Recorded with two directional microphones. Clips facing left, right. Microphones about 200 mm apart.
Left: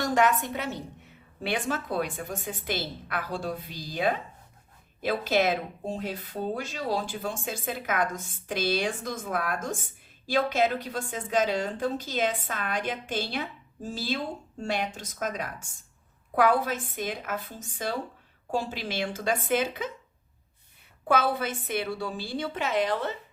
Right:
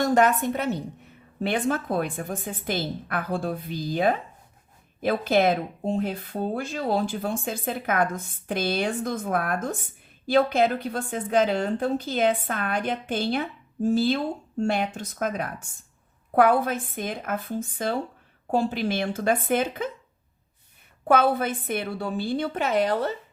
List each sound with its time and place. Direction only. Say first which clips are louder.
0.1 s a woman's voice: right 4 dB; 40° right (ahead or behind)
1.5 s a woman's voice: right 5 dB; 50° right (ahead or behind)
21.1 s a woman's voice: right 5 dB; 55° right (ahead or behind)